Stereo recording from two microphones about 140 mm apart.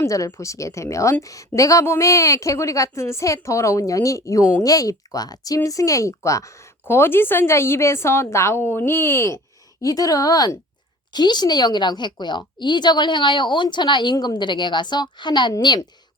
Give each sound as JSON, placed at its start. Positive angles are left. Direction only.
{"t": 0.0, "sound": "a woman's voice", "side_deg": 20}